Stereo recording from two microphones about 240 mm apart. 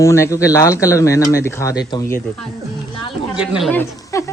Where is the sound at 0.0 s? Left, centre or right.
Centre.